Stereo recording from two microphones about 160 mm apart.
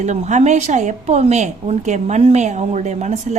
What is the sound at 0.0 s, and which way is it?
A woman's voice, 45° right (ahead or behind).